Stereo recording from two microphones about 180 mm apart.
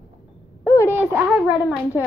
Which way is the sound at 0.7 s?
15° left (ahead or behind).